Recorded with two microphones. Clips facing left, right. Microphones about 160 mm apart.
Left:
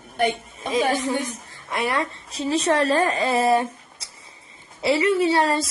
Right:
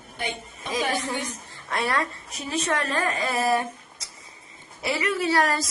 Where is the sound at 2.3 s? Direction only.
30° left (ahead or behind).